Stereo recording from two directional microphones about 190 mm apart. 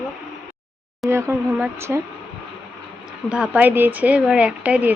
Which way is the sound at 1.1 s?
10° right (ahead or behind).